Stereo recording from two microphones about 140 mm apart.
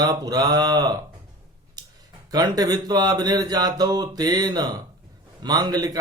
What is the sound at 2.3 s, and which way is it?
Speech, 30° right (ahead or behind).